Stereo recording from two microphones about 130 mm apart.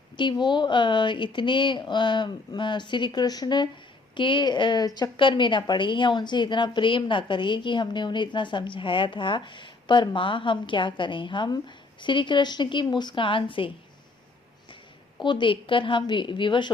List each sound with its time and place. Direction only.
0.2 s a woman's voice: 35° left (ahead or behind)
15.2 s a woman's voice: 40° left (ahead or behind)